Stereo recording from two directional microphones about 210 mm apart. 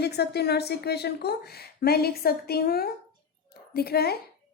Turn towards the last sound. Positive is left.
turn(degrees=50)  # may be behind; listen again after turning